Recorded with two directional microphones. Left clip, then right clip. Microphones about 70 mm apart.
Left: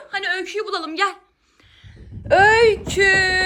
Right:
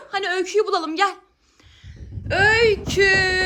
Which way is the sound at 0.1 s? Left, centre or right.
Right.